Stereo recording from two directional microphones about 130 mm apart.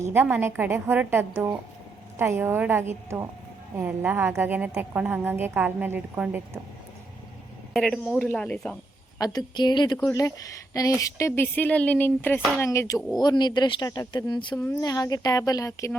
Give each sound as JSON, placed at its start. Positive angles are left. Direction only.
{"t": 0.0, "sound": "a woman's voice", "side_deg": -15}
{"t": 7.7, "sound": "a man's voice", "side_deg": 5}
{"t": 9.1, "sound": "speech", "side_deg": 30}
{"t": 10.0, "sound": "speech", "side_deg": 25}
{"t": 13.1, "sound": "speech", "side_deg": 35}